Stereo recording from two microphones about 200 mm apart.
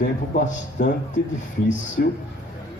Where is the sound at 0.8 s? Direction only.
50° left (ahead or behind).